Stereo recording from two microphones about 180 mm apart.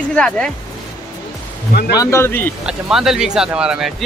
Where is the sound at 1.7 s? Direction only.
60° left (ahead or behind).